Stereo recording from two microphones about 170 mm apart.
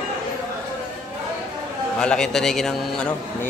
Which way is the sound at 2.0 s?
5° left (ahead or behind).